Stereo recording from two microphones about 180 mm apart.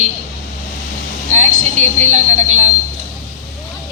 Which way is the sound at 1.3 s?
40° right (ahead or behind).